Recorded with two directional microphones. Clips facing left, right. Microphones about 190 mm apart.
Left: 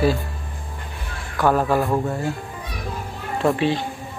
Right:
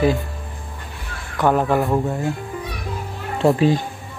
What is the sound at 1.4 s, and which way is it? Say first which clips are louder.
Speech: right 1 dB; 20° right (ahead or behind).